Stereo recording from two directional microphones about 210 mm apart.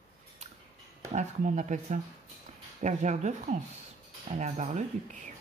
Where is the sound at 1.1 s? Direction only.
35° right (ahead or behind).